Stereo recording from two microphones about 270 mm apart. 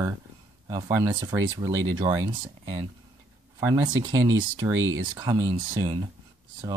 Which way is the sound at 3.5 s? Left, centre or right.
Centre.